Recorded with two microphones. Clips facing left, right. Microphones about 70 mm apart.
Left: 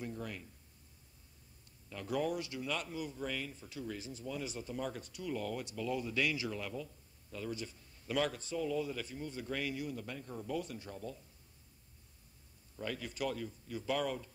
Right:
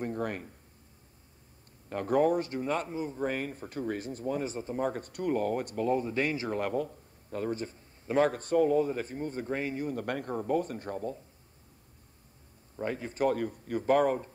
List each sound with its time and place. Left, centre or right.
0.0 s speech: right
1.9 s speech: right
9.9 s speech: right
12.7 s a man's voice: right